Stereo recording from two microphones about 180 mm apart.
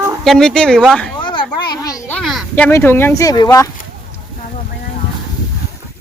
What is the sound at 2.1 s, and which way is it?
Speech, 5° left (ahead or behind).